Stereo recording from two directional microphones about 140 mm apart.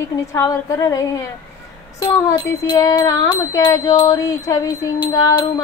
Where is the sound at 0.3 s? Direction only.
25° left (ahead or behind).